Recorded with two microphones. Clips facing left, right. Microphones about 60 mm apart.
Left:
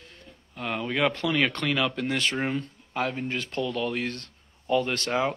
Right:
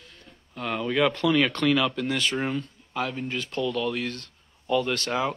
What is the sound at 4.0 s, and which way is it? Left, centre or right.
Speech, left.